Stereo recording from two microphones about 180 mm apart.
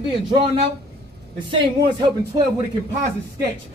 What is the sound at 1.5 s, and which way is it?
Speech, 25° right (ahead or behind).